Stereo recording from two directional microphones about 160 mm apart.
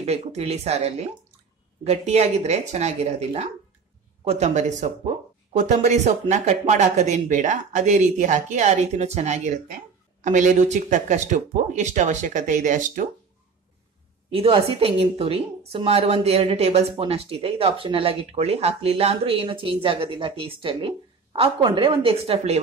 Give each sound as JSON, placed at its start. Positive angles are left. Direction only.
{"t": 0.0, "sound": "a woman's voice", "side_deg": -40}
{"t": 14.3, "sound": "a woman's voice", "side_deg": -35}